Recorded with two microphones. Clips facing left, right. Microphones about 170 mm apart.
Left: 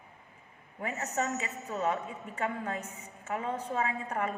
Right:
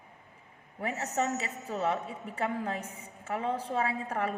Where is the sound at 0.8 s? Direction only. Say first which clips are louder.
Right 2 dB; 35° right (ahead or behind).